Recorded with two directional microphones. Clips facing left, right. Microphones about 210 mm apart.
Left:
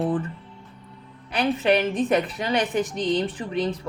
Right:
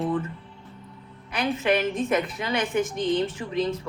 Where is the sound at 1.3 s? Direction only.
35° left (ahead or behind).